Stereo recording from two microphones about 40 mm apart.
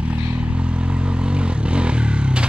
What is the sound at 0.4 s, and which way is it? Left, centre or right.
Vehicle, right.